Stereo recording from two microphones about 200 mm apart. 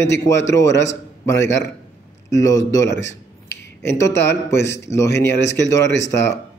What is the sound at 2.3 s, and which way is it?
Speech, 15° left (ahead or behind).